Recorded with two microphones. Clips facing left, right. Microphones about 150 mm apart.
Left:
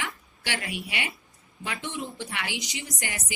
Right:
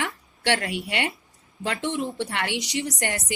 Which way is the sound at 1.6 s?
75° right (ahead or behind).